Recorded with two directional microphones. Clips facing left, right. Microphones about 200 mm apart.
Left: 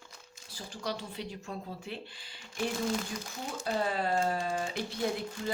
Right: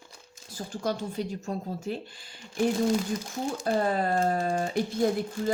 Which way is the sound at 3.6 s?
50° right (ahead or behind).